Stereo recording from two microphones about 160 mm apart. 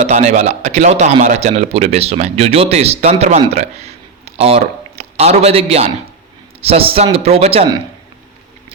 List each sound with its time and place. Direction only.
0.0 s a man's voice: 45° right (ahead or behind)
3.5 s a sound: 45° right (ahead or behind)
4.9 s a man's voice: 40° right (ahead or behind)